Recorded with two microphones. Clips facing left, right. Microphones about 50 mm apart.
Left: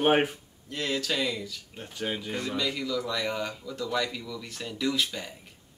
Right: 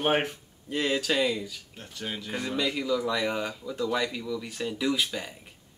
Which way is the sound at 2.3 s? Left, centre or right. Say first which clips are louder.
Right 6 dB; centre.